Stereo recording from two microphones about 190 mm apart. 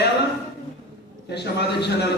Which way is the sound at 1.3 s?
60° left (ahead or behind).